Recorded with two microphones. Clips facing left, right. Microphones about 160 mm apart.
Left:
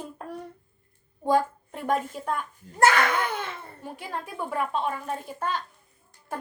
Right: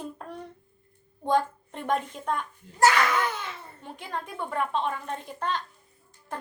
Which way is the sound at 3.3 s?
55° left (ahead or behind).